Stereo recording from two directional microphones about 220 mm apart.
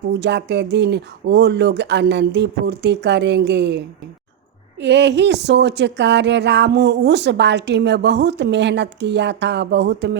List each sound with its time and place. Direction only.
0.1 s speech: 50° right (ahead or behind)